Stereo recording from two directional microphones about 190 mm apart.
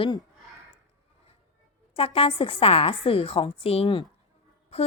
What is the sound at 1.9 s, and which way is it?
Speech, 30° left (ahead or behind).